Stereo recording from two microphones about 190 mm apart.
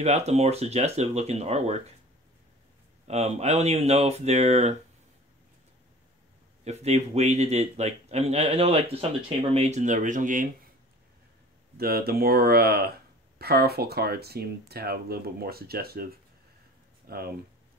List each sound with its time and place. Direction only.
0.0 s a man's voice: 35° right (ahead or behind)
3.1 s a man's voice: 35° right (ahead or behind)
6.6 s a man's voice: 35° right (ahead or behind)
11.7 s speech: 55° right (ahead or behind)